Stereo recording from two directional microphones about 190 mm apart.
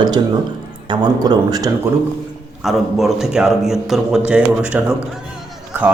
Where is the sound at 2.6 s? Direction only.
Centre (ahead or behind).